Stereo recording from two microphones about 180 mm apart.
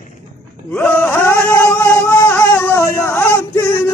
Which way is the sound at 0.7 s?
10° left (ahead or behind).